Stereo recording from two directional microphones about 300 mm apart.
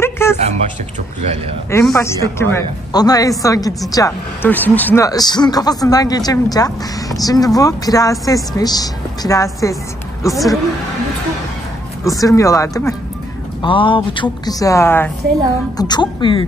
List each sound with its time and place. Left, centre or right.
0.0 s a sound: centre
1.7 s a man's voice: centre
12.0 s a man's voice: centre